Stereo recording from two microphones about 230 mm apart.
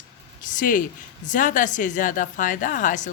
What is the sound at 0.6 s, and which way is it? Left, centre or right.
Speech, left.